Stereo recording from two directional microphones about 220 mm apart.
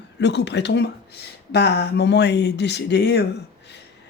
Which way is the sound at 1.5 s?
50° left (ahead or behind).